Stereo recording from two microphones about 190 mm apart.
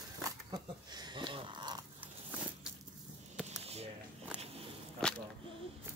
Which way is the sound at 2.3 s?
10° right (ahead or behind).